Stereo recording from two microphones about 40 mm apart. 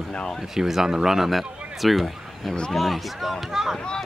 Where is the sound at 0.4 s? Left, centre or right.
Centre.